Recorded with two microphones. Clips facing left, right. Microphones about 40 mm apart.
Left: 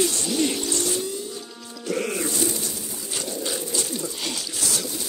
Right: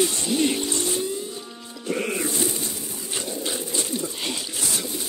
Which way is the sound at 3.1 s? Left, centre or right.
Centre.